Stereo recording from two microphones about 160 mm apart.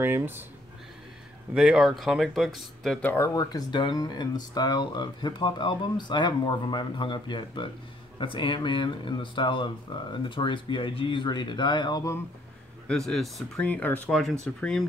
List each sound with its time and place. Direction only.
0.0 s speech: 15° right (ahead or behind)
1.5 s speech: 5° right (ahead or behind); by 3.3 s 10° left (ahead or behind)
3.3 s speech: 25° left (ahead or behind)
12.8 s speech: 5° left (ahead or behind)